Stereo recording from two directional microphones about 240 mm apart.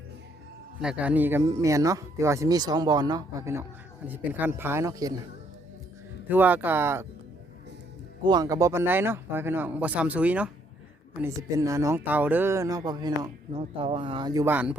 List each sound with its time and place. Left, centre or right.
0.8 s speech: centre
6.2 s speech: centre
8.2 s speech: centre